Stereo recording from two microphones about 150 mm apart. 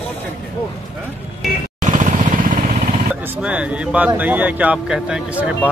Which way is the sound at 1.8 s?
60° right (ahead or behind).